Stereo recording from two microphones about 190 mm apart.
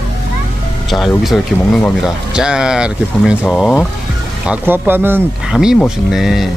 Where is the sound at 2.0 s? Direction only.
5° right (ahead or behind).